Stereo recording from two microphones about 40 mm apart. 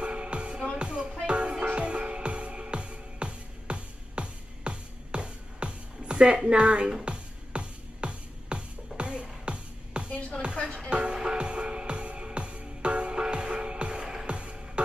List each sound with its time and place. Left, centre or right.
0.0 s music: right